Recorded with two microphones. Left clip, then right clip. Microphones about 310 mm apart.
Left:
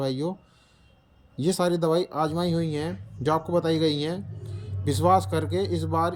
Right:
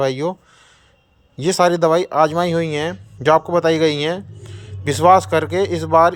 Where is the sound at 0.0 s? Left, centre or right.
Centre.